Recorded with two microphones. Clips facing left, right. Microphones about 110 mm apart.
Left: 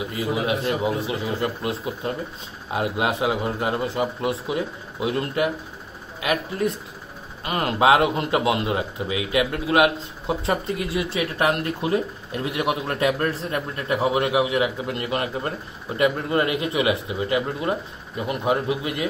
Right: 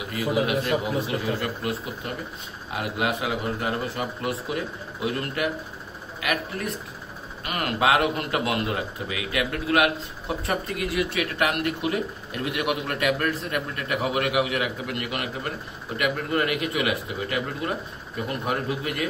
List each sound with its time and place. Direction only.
0.0 s a man's voice: 25° left (ahead or behind)